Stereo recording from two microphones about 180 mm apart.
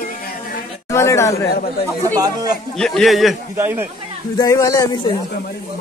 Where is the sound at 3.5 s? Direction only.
10° right (ahead or behind).